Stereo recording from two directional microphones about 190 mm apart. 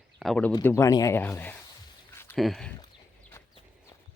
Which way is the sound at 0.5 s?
15° left (ahead or behind).